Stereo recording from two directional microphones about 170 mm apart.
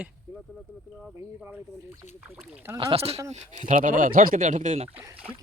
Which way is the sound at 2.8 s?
35° right (ahead or behind).